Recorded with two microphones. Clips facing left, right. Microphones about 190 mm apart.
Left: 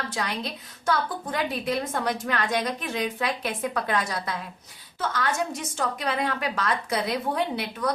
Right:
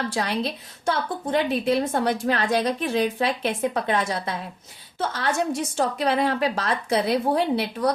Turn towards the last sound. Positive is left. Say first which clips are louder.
# right 5 dB
turn(degrees=-35)  # may be behind; listen again after turning